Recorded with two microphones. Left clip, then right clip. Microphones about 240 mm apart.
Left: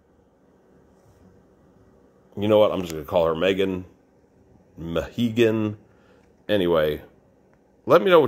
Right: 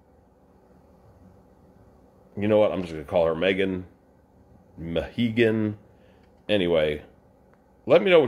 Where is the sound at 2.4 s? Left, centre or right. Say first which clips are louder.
Left 3 dB; centre.